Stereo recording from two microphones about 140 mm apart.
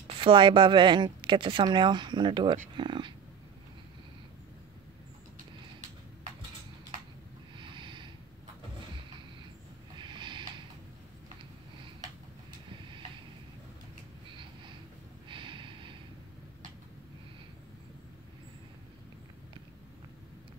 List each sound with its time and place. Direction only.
0.2 s speech: 35° right (ahead or behind)
7.5 s a sound: 35° right (ahead or behind)
9.9 s snort: 35° right (ahead or behind)
15.2 s snort: 35° right (ahead or behind)